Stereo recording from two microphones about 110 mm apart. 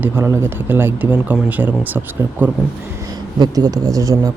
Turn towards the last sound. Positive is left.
turn(degrees=-30)  # may be behind; listen again after turning